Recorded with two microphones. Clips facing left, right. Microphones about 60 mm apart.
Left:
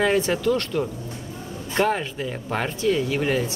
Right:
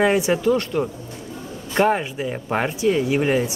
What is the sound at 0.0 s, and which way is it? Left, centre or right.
Speech, centre.